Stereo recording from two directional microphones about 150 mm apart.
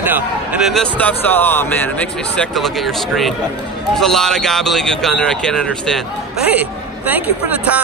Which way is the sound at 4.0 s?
5° left (ahead or behind).